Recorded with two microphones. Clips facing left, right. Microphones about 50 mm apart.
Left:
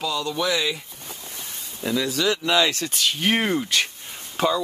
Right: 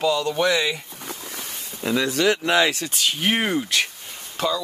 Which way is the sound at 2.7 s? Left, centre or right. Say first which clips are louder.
Even; centre.